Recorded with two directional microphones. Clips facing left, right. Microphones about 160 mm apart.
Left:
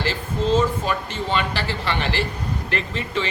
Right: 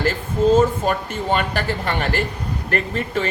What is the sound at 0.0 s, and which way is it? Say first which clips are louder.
Speech: right 5 dB; 50° right (ahead or behind).